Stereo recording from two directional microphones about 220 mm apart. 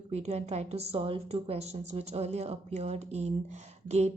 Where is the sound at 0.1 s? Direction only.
30° right (ahead or behind).